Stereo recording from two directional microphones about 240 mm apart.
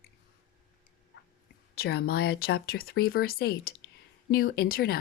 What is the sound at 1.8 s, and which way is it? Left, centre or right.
Speech, left.